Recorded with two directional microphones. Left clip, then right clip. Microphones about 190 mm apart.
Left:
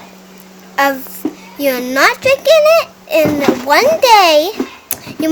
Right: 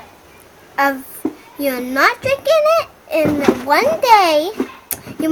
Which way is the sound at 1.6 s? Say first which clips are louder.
Left 3 dB; 20° left (ahead or behind).